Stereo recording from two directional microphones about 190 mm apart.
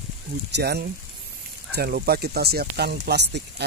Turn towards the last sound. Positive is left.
turn(degrees=-65)  # may be behind; listen again after turning